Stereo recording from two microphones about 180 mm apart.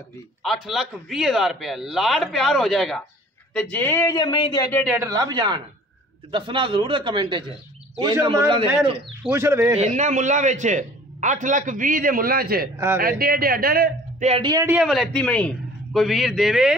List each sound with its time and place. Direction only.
0.4 s a man's voice: centre (ahead or behind); by 4.8 s 20° left (ahead or behind)
4.9 s a man's voice: 20° right (ahead or behind)
9.8 s a man's voice: 40° right (ahead or behind)
12.7 s speech: 15° right (ahead or behind)
13.0 s speech: 55° right (ahead or behind)
14.2 s speech: 35° right (ahead or behind)
14.5 s speech: 15° right (ahead or behind)
14.8 s a man's voice: centre (ahead or behind)